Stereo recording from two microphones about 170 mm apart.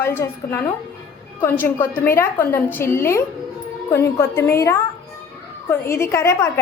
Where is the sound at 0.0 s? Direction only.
15° left (ahead or behind).